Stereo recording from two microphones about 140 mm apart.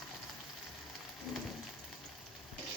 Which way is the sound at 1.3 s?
Centre (ahead or behind).